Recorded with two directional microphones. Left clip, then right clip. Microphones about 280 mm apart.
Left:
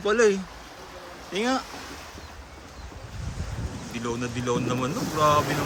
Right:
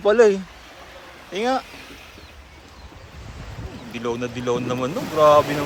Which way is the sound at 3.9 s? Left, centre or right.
Centre.